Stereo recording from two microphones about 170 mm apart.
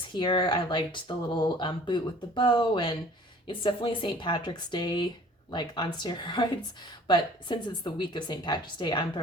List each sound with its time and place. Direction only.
0.1 s speech: 25° left (ahead or behind)